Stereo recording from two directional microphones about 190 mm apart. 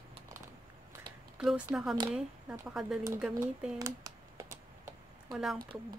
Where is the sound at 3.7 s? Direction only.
15° right (ahead or behind).